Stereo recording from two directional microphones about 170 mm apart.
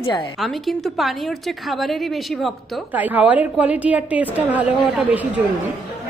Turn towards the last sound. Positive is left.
turn(degrees=-10)  # may be behind; listen again after turning